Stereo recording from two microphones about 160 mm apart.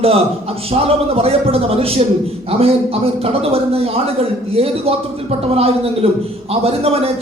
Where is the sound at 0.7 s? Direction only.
40° right (ahead or behind).